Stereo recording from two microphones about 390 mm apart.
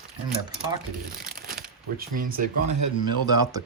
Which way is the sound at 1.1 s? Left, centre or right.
Right.